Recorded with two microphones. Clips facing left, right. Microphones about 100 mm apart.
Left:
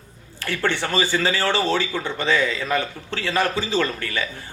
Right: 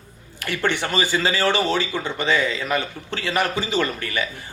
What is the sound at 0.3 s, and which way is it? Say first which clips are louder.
A man's voice: even; 15° right (ahead or behind).